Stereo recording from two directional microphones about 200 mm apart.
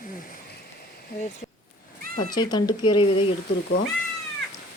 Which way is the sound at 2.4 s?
20° left (ahead or behind).